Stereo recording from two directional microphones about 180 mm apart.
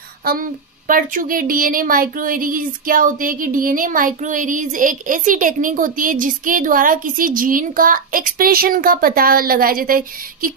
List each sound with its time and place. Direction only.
0.2 s a woman's voice: 50° right (ahead or behind)